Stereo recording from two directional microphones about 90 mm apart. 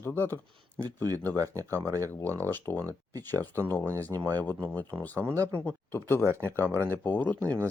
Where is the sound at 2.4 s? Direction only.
20° left (ahead or behind).